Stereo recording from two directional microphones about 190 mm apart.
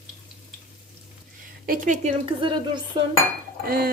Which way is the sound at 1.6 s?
45° right (ahead or behind).